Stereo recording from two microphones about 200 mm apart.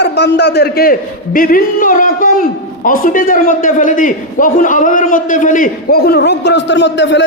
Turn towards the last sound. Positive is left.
turn(degrees=65)  # may be behind; listen again after turning